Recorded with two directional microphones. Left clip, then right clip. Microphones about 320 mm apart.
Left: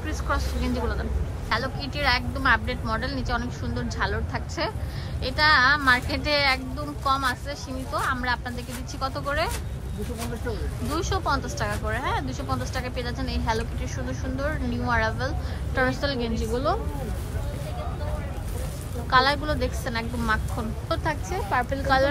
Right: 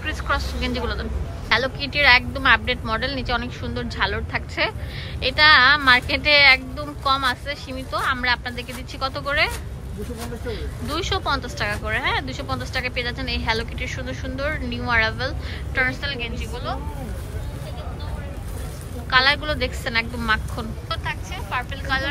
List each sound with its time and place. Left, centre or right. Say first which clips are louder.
0.0 s a woman's voice: right 4 dB; centre
10.5 s speech: right 4 dB; centre
19.0 s speech: right 3 dB; centre